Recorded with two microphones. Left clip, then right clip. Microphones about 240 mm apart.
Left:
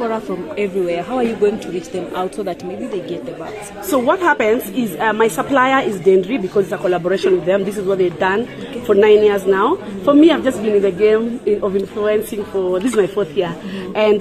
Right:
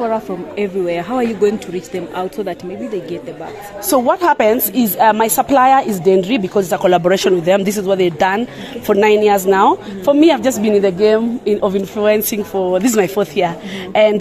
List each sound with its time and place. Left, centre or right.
0.0 s speech: right
3.9 s a woman's voice: right